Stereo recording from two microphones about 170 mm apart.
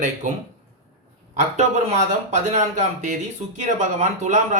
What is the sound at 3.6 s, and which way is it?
Speech, 45° right (ahead or behind).